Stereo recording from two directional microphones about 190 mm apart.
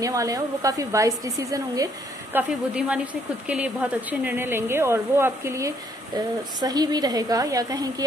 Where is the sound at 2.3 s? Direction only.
5° right (ahead or behind).